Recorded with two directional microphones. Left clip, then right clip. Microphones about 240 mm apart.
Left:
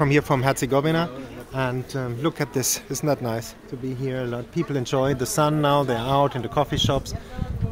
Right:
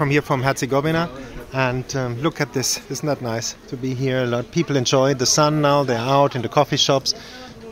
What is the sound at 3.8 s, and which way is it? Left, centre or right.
A man's voice, centre.